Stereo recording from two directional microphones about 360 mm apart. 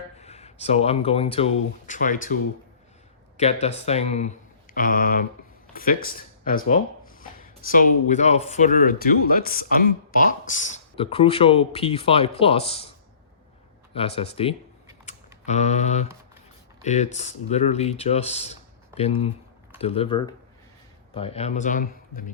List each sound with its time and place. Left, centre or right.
0.2 s speech: centre
13.9 s speech: centre
15.0 s typing: centre
16.8 s speech: centre